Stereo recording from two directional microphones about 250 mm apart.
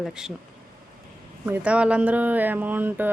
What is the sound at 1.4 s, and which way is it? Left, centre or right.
Speech, centre.